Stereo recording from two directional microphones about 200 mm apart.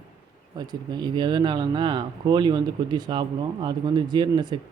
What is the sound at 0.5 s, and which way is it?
Speech, 20° right (ahead or behind).